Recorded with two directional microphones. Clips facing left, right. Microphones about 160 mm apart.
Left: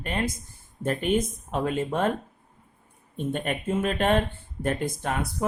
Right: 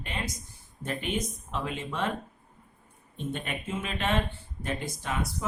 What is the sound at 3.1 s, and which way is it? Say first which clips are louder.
Speech: left 6 dB; 50° left (ahead or behind).